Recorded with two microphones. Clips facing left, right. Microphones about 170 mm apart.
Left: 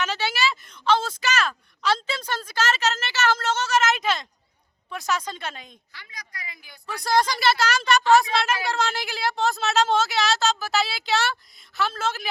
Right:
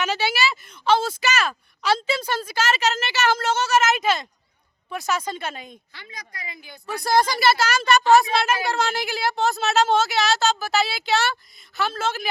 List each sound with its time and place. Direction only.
0.0 s a woman's voice: 10° right (ahead or behind)
5.9 s a woman's voice: 25° right (ahead or behind)
7.0 s a woman's voice: 5° right (ahead or behind)